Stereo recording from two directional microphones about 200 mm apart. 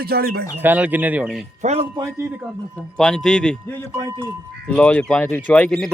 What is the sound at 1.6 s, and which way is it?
Speech, 30° right (ahead or behind).